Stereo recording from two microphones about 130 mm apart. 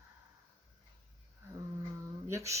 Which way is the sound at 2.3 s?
25° right (ahead or behind).